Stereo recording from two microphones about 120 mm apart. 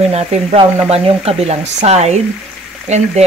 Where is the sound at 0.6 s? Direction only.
55° right (ahead or behind).